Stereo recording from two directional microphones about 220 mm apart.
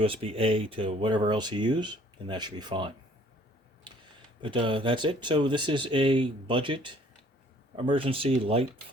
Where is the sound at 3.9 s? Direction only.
20° right (ahead or behind).